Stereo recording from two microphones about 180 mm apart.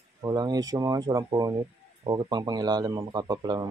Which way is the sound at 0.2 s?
20° right (ahead or behind).